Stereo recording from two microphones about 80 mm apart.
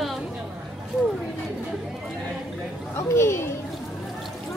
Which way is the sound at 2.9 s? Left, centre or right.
Left.